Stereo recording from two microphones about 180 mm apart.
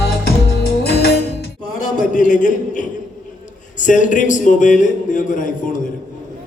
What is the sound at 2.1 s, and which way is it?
A man's voice, 45° left (ahead or behind).